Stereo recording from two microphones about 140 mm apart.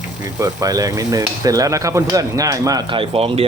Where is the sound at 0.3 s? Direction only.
25° right (ahead or behind).